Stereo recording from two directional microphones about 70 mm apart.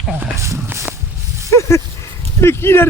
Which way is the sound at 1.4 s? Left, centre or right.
Left.